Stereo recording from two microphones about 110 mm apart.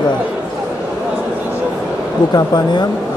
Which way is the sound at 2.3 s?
40° left (ahead or behind).